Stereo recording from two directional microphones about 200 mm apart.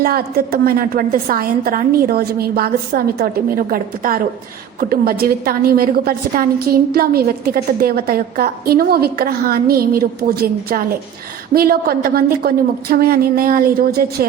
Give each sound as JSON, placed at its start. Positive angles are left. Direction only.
{"t": 0.0, "sound": "a woman's voice", "side_deg": -50}